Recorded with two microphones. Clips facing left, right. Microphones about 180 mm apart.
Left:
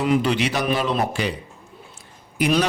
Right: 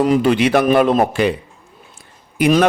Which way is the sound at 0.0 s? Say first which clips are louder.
Right 6 dB; 45° right (ahead or behind).